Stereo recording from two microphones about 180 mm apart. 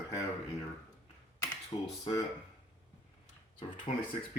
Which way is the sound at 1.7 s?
25° left (ahead or behind).